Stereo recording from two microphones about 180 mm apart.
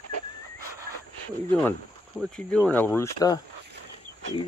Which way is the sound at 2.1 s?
5° left (ahead or behind).